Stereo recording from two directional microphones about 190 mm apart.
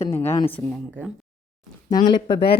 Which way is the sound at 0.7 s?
5° right (ahead or behind).